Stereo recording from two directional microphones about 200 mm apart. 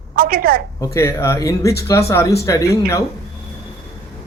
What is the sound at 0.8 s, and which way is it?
Speech, 15° left (ahead or behind).